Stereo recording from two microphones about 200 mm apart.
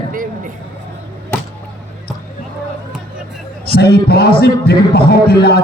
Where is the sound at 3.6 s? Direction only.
50° left (ahead or behind).